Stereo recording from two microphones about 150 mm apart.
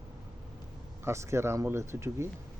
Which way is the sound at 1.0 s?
20° right (ahead or behind).